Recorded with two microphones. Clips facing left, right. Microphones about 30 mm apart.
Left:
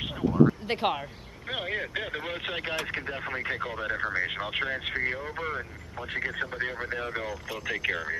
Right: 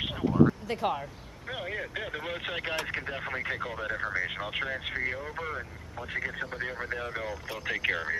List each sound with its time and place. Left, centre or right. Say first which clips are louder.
0.0 s a sound: left 1 dB; centre
0.7 s speech: left 2 dB; left
1.5 s speech: left 4 dB; left
2.2 s speech: left 1 dB; centre
7.4 s speech: right 1 dB; centre